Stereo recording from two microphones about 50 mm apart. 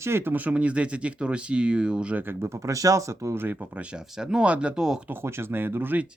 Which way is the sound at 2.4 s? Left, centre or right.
Right.